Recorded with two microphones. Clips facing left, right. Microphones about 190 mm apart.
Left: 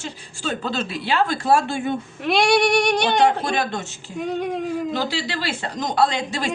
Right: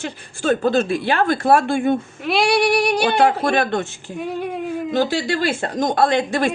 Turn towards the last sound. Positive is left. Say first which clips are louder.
# right 6 dB
turn(degrees=-55)  # may be behind; listen again after turning